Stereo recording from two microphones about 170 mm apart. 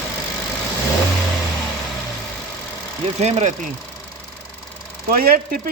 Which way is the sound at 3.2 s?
40° right (ahead or behind).